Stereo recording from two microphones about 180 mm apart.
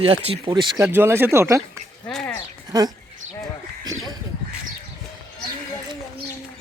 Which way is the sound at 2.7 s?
20° right (ahead or behind).